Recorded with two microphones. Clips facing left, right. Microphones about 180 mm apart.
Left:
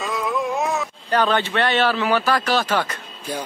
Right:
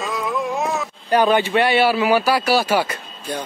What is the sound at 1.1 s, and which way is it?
A man's voice, 10° right (ahead or behind).